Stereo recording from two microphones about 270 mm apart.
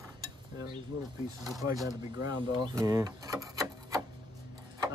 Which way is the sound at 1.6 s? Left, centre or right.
Centre.